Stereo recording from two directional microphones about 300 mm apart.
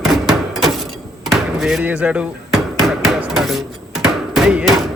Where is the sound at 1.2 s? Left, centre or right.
Centre.